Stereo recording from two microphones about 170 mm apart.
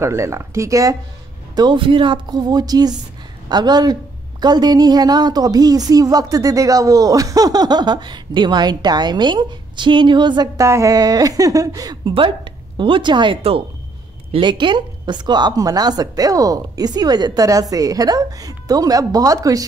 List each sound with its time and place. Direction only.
0.0 s a woman's voice: 15° right (ahead or behind)